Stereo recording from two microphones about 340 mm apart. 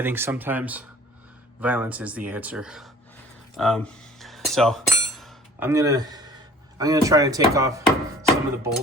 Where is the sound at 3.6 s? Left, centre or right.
Centre.